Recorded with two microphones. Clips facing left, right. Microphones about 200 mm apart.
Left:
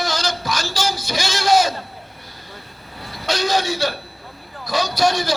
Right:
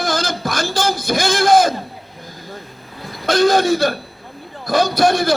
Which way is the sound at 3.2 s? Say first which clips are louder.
Right 7 dB; 55° right (ahead or behind).